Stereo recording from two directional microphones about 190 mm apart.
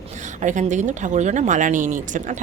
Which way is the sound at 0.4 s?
40° right (ahead or behind).